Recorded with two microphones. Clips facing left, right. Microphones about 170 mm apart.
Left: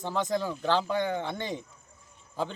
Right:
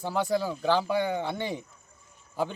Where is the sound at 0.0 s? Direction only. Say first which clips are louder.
Right 2 dB; 10° right (ahead or behind).